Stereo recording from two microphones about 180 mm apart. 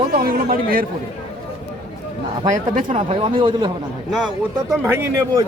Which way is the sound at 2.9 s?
30° right (ahead or behind).